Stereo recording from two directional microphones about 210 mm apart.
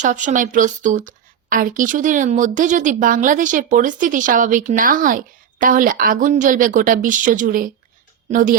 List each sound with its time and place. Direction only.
0.0 s speech: 35° right (ahead or behind)